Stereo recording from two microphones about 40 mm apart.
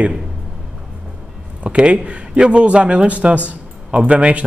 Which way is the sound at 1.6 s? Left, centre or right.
Right.